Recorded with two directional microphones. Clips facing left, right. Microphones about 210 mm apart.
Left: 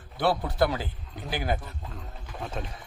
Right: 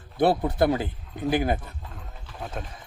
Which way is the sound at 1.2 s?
50° right (ahead or behind).